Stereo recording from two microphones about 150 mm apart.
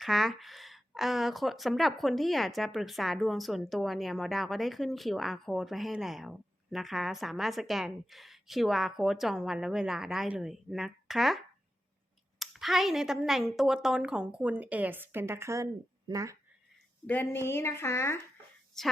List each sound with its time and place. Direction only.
0.0 s a woman's voice: centre (ahead or behind); by 16.4 s 20° right (ahead or behind)
17.1 s speech: 15° left (ahead or behind)